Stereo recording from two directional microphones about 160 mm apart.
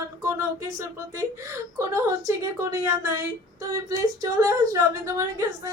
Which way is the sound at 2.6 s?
20° right (ahead or behind).